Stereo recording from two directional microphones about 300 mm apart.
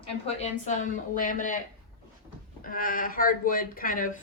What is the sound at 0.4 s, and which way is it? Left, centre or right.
A woman's voice, left.